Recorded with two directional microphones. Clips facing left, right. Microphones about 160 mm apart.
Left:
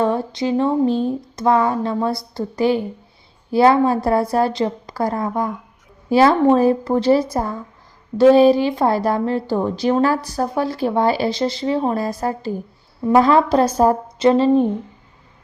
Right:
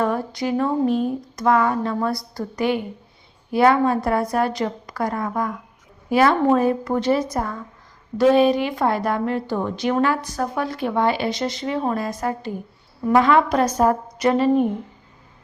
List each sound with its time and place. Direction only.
0.0 s a woman's voice: 25° left (ahead or behind)